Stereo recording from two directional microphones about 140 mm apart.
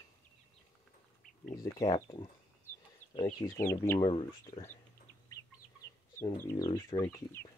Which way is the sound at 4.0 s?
35° left (ahead or behind).